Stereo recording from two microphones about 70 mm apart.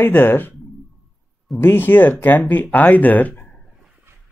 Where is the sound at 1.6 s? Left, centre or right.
Left.